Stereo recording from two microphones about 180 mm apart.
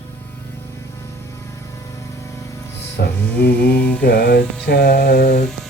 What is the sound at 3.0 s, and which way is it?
Music, 65° left (ahead or behind).